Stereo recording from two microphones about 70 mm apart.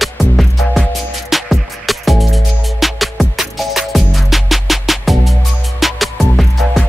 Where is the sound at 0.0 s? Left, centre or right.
Centre.